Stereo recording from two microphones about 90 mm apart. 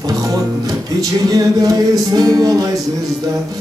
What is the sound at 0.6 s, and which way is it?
Music, 45° right (ahead or behind).